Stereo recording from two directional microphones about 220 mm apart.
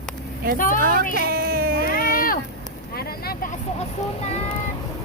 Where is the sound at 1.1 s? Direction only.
45° right (ahead or behind).